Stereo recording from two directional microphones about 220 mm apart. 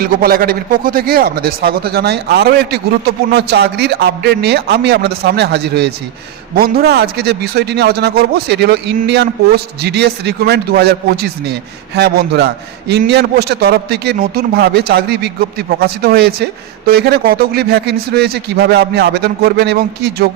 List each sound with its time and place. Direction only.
0.0 s speech: 40° right (ahead or behind)